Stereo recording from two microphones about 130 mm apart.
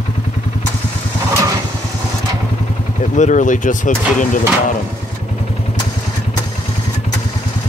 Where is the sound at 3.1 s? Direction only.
70° left (ahead or behind).